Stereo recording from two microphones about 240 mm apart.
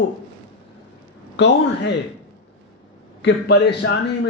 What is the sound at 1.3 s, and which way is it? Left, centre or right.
Speech, left.